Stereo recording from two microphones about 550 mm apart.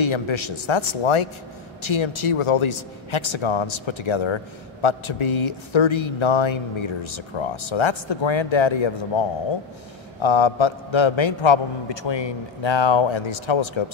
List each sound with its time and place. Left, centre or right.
0.0 s a man's voice: left
10.2 s a man's voice: left